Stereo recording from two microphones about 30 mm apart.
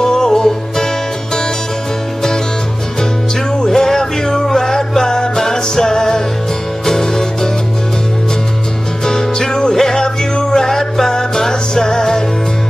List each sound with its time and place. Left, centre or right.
0.0 s music: centre
3.6 s music: centre
9.0 s music: centre